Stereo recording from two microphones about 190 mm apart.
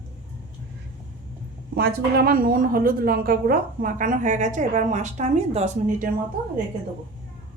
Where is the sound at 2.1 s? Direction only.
50° right (ahead or behind).